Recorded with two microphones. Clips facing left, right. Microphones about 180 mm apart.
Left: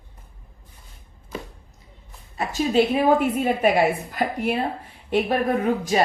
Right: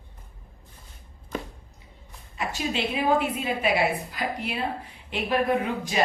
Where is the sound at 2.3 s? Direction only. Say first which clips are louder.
Left 9 dB; 40° left (ahead or behind).